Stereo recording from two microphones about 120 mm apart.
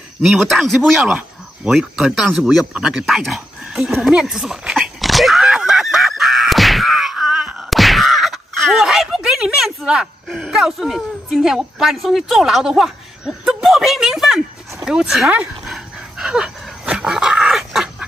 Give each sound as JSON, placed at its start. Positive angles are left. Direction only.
{"t": 0.2, "sound": "cricket", "side_deg": 0}
{"t": 14.9, "sound": "dog", "side_deg": -5}